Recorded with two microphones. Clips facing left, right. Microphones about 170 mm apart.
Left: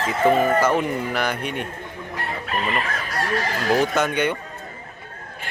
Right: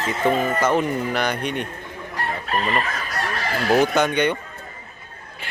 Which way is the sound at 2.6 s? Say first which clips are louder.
Right 2 dB; 35° right (ahead or behind).